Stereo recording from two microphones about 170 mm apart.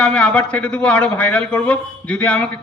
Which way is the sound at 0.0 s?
5° left (ahead or behind).